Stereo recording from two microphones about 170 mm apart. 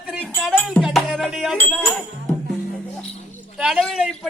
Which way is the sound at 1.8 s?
5° left (ahead or behind).